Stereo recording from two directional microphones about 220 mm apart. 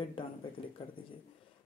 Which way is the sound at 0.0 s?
25° left (ahead or behind).